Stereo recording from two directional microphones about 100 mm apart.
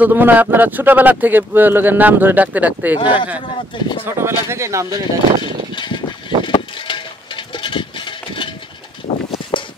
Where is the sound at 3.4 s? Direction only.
50° left (ahead or behind).